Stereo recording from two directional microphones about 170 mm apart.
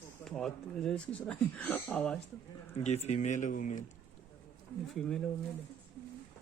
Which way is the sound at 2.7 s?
40° left (ahead or behind).